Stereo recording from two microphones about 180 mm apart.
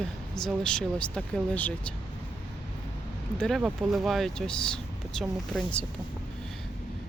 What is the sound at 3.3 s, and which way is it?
Speech, centre (ahead or behind).